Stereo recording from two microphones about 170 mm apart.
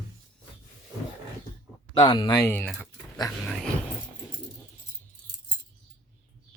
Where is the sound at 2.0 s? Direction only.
30° left (ahead or behind).